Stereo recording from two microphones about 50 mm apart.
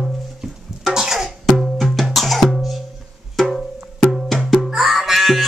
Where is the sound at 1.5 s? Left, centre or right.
Centre.